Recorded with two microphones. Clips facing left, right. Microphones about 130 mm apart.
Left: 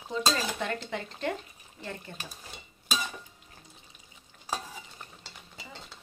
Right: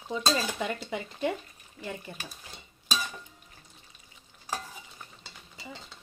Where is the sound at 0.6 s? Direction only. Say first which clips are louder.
Even; 10° right (ahead or behind).